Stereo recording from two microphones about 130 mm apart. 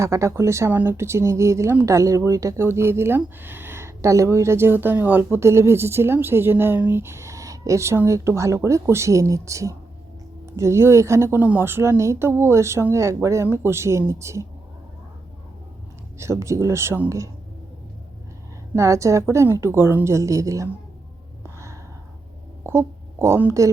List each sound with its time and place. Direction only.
0.0 s speech: 25° right (ahead or behind)
16.1 s speech: 20° right (ahead or behind)
18.7 s speech: 25° right (ahead or behind)
22.6 s speech: 20° right (ahead or behind)